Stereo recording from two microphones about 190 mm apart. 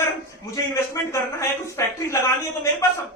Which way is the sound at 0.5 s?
15° left (ahead or behind).